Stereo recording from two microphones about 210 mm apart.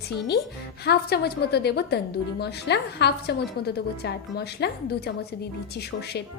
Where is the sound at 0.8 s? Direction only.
50° left (ahead or behind).